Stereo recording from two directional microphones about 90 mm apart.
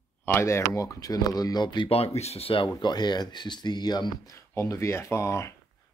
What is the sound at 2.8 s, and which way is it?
Speech, 50° left (ahead or behind).